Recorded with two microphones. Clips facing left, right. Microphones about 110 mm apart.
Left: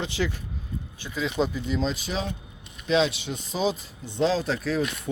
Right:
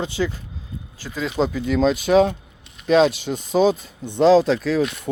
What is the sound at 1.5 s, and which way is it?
Speech, 80° right.